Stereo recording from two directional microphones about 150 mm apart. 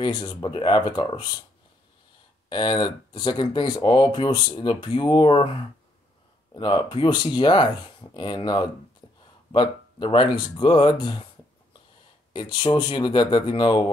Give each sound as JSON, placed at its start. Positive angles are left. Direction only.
{"t": 0.0, "sound": "speech", "side_deg": 30}
{"t": 2.5, "sound": "speech", "side_deg": 30}
{"t": 6.5, "sound": "speech", "side_deg": 30}
{"t": 12.5, "sound": "speech", "side_deg": 30}